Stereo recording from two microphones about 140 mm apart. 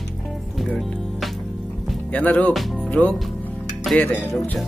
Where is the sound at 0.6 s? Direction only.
Centre (ahead or behind).